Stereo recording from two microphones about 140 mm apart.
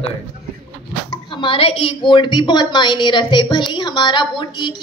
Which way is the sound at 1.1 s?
35° left (ahead or behind).